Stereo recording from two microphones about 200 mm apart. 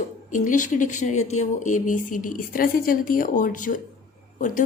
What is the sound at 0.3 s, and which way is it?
A woman's voice, 40° left (ahead or behind).